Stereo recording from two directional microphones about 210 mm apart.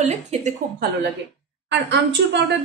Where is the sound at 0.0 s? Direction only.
35° right (ahead or behind).